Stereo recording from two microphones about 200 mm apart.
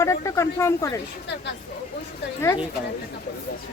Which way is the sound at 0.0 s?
15° left (ahead or behind).